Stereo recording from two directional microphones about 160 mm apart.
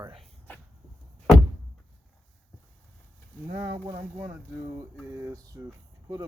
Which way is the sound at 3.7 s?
25° right (ahead or behind).